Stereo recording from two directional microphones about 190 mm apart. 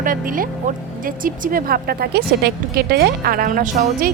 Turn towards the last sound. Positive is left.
turn(degrees=-45)  # may be behind; listen again after turning